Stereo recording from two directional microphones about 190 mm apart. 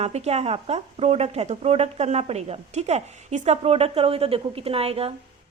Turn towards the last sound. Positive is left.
turn(degrees=-30)  # may be behind; listen again after turning